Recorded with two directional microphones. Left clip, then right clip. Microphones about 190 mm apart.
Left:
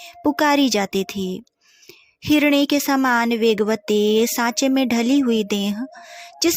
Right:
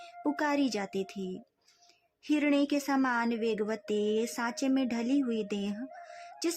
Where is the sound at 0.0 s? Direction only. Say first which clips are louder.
Left 13 dB; 35° left (ahead or behind).